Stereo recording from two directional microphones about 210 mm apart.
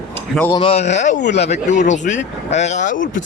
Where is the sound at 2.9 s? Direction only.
65° left (ahead or behind).